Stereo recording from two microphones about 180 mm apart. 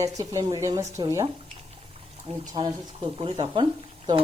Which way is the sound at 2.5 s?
30° right (ahead or behind).